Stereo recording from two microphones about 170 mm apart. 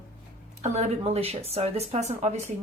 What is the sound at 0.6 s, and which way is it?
Speech, 40° right (ahead or behind).